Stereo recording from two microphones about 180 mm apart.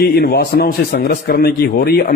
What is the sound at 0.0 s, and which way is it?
A man's voice, 60° left (ahead or behind).